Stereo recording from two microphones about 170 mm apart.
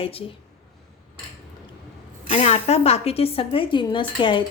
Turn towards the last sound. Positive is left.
turn(degrees=30)  # may be behind; listen again after turning